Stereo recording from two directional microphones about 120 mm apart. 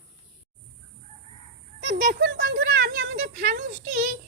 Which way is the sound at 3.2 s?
90° right.